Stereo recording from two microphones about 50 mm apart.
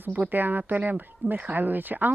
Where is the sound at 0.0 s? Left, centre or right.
Right.